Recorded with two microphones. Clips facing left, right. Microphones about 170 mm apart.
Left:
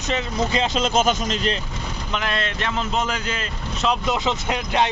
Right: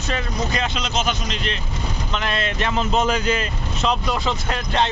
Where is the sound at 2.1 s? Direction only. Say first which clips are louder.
Even; centre (ahead or behind).